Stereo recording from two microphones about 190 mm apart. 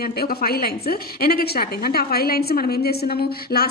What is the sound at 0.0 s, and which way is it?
A woman's voice, 55° left (ahead or behind).